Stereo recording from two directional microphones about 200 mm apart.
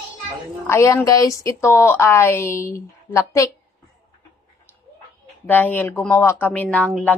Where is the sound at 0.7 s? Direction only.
15° left (ahead or behind).